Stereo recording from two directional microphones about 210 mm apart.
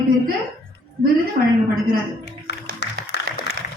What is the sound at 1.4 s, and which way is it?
Speech, 45° right (ahead or behind).